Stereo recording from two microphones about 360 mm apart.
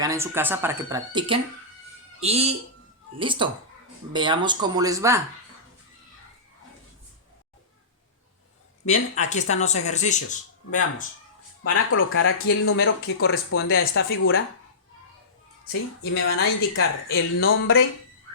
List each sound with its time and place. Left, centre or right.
0.0 s speech: centre
8.9 s speech: centre
11.7 s speech: left
16.1 s speech: left